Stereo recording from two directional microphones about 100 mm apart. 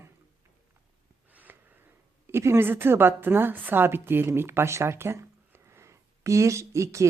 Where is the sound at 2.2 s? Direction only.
25° right (ahead or behind).